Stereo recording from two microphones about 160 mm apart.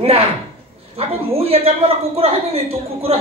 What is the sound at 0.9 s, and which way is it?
A man's voice, 40° right (ahead or behind).